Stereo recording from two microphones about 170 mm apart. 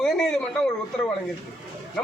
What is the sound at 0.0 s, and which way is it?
Speech, 5° left (ahead or behind).